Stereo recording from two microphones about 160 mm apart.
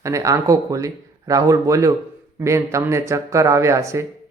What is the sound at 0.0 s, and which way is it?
Speech, 20° right (ahead or behind).